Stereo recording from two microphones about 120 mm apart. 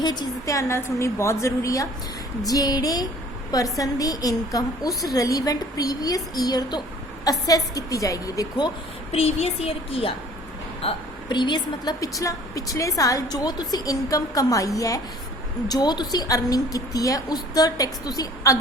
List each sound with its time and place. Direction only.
0.0 s a woman's voice: 35° left (ahead or behind)
9.1 s speech: 60° left (ahead or behind)
10.8 s a woman's voice: 40° left (ahead or behind)